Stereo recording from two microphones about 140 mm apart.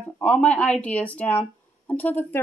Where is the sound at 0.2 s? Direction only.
10° left (ahead or behind).